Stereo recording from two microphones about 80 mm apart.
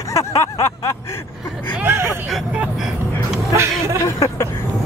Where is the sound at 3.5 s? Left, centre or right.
Right.